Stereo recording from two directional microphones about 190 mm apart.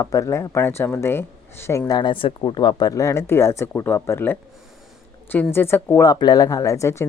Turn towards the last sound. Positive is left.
turn(degrees=15)  # may be behind; listen again after turning